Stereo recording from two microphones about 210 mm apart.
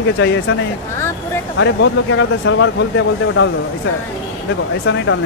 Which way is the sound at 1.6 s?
65° left (ahead or behind).